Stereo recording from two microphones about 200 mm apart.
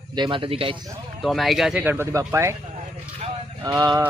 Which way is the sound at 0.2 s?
25° right (ahead or behind).